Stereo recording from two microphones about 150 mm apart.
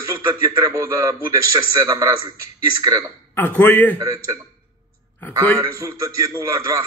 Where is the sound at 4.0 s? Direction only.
20° right (ahead or behind).